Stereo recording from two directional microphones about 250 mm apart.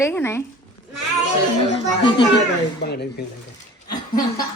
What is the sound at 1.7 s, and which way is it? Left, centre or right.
Speech, centre.